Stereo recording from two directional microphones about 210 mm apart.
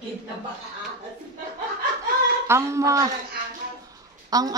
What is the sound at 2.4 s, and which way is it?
Speech, 15° right (ahead or behind).